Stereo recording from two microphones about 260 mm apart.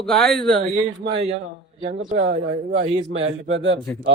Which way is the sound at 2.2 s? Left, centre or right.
Right.